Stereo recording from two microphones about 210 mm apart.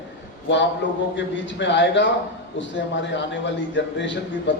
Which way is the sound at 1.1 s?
60° left (ahead or behind).